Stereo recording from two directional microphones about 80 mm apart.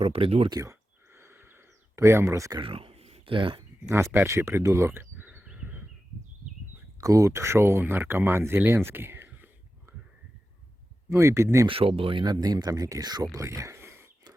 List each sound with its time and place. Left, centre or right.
0.5 s a sound: right
2.0 s speech: right
2.6 s speech: right
3.8 s speech: right
7.0 s speech: right
11.1 s speech: right
11.7 s speech: right
13.3 s a sound: right